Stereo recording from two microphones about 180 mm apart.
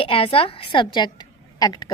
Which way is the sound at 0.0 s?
30° left (ahead or behind).